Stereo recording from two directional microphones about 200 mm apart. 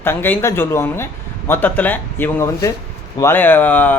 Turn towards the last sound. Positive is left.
turn(degrees=10)  # may be behind; listen again after turning